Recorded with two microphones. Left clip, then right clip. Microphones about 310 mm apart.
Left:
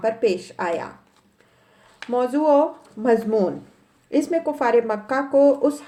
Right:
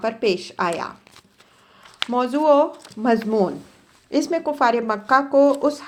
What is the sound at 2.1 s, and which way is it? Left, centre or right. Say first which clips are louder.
Speech: right 1 dB; right.